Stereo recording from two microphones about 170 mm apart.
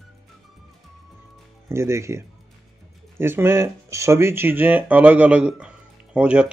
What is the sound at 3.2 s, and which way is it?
Speech, 15° right (ahead or behind).